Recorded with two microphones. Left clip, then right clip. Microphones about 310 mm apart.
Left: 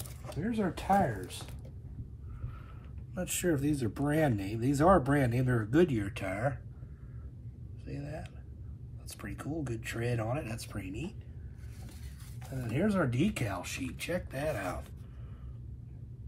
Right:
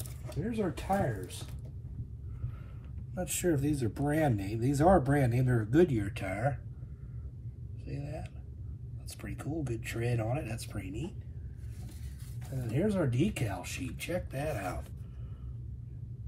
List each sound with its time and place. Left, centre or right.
0.2 s speech: centre
3.2 s speech: centre
7.8 s a sound: centre
9.2 s speech: centre
12.4 s speech: centre